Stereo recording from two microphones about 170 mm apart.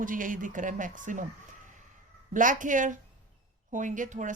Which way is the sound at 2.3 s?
50° right (ahead or behind).